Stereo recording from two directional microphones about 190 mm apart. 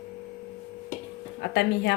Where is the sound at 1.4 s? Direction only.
60° left (ahead or behind).